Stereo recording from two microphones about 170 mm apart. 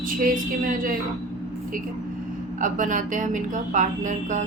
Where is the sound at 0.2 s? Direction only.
55° right (ahead or behind).